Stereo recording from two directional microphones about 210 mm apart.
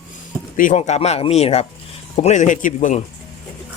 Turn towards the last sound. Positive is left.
turn(degrees=35)  # may be behind; listen again after turning